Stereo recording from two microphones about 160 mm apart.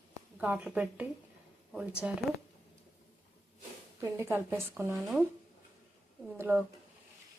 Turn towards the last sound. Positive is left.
turn(degrees=-15)  # may be behind; listen again after turning